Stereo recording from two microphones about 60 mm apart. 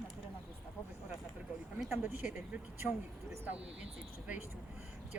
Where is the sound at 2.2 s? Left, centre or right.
Centre.